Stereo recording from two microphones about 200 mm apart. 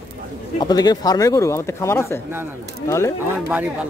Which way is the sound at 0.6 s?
20° left (ahead or behind).